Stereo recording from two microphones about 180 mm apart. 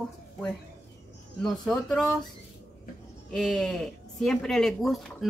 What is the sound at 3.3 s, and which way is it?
Speech, centre (ahead or behind).